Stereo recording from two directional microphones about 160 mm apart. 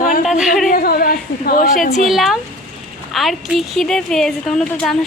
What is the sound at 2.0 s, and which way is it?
A woman's voice, centre (ahead or behind).